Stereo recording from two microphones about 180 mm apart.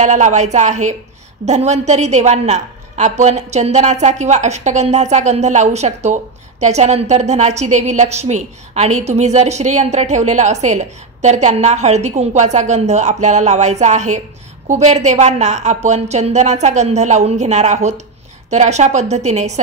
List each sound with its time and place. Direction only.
0.0 s a woman's voice: 40° right (ahead or behind)